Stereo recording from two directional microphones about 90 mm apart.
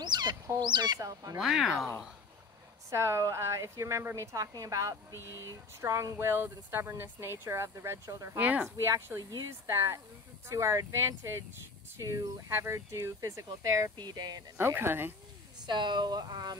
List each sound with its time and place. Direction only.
0.0 s chicken: 50° right (ahead or behind)
0.6 s speech: 55° right (ahead or behind)
0.9 s a woman's voice: 40° right (ahead or behind)
1.4 s speech: 5° right (ahead or behind)
2.9 s a woman's voice: 30° right (ahead or behind)
8.4 s speech: 15° right (ahead or behind)
8.7 s a woman's voice: 30° right (ahead or behind)
13.9 s speech: 50° right (ahead or behind)
14.6 s speech: 25° right (ahead or behind)
15.6 s speech: 55° right (ahead or behind)